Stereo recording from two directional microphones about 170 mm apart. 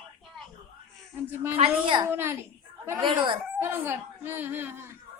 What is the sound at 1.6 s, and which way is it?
Speech, 30° right (ahead or behind).